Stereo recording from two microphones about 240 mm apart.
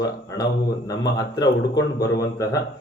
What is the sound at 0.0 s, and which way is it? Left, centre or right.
Speech, centre.